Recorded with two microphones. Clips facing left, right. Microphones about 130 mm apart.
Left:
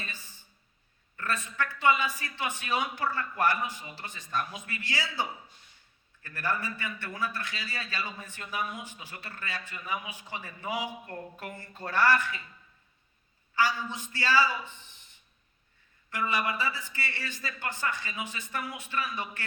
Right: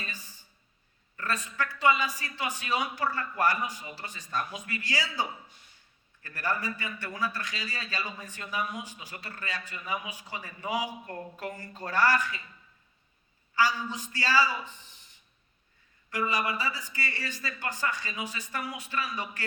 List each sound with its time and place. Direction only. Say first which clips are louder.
1.1 s a sound: even; 40° right (ahead or behind)
1.5 s a man's voice: even; 40° right (ahead or behind)
6.2 s a man's voice: right 1 dB; 40° right (ahead or behind)
13.6 s a man's voice: right 1 dB; 40° right (ahead or behind)
16.1 s a man's voice: even; 40° right (ahead or behind)